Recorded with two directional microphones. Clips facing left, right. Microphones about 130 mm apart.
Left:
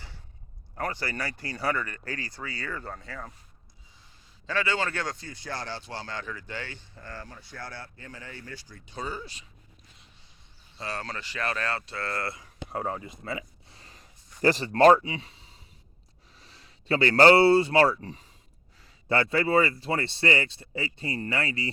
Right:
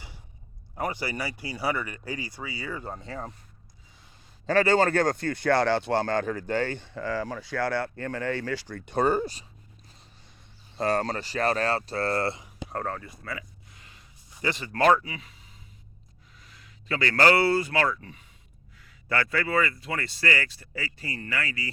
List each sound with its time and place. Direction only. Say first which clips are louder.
0.8 s speech: right 2 dB; 15° right (ahead or behind)
4.4 s speech: right 8 dB; 40° right (ahead or behind); by 9.2 s 60° right (ahead or behind)
9.2 s speech: right 11 dB; 40° right (ahead or behind)
10.8 s speech: right 10 dB; 45° right (ahead or behind)
12.6 s a sound: even; 10° left (ahead or behind); by 14.1 s 35° left (ahead or behind)
14.4 s speech: left 4 dB; 35° left (ahead or behind)